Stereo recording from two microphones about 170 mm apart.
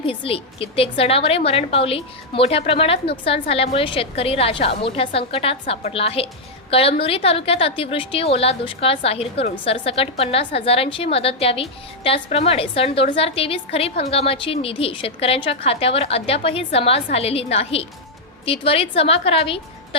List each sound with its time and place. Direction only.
0.0 s a woman's voice: 35° left (ahead or behind)